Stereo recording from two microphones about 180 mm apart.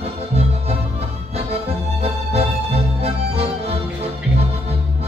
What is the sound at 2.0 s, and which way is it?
Music, 35° right (ahead or behind).